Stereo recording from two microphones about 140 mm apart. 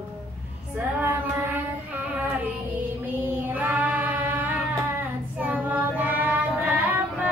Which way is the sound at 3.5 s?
10° right (ahead or behind).